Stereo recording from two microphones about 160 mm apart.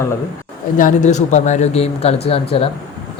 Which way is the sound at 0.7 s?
55° left (ahead or behind).